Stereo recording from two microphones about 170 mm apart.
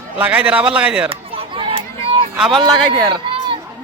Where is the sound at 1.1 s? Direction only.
30° right (ahead or behind).